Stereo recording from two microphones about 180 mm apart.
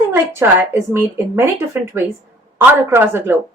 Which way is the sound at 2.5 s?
15° right (ahead or behind).